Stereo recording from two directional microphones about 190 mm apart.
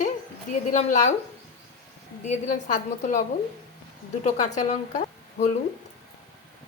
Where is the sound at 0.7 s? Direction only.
40° left (ahead or behind).